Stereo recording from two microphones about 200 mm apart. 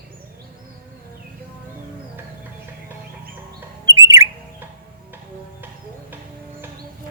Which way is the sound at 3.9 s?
15° right (ahead or behind).